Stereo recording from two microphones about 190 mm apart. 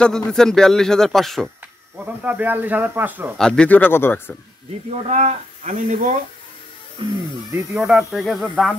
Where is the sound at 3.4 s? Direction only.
5° left (ahead or behind).